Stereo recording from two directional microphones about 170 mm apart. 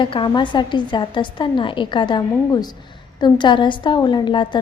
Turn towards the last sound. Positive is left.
turn(degrees=30)  # may be behind; listen again after turning